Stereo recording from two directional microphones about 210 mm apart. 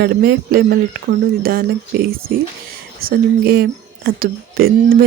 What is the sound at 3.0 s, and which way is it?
Speech, 45° right (ahead or behind).